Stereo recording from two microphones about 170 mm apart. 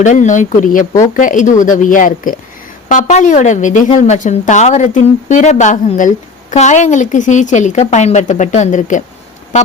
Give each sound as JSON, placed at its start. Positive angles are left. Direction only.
{"t": 0.0, "sound": "a woman's voice", "side_deg": 45}